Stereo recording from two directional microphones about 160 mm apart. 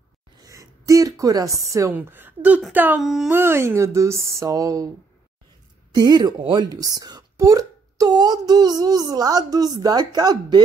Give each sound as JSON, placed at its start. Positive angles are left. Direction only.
{"t": 0.4, "sound": "speech", "side_deg": -20}
{"t": 3.0, "sound": "speech", "side_deg": 0}
{"t": 3.3, "sound": "speech", "side_deg": -15}
{"t": 5.9, "sound": "speech", "side_deg": -25}